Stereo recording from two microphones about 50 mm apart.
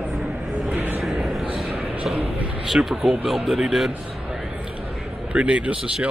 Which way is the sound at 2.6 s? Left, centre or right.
Centre.